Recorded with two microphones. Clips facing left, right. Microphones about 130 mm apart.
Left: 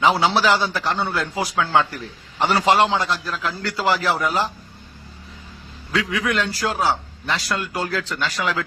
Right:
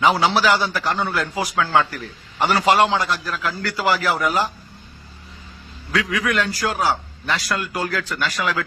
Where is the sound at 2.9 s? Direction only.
25° left (ahead or behind).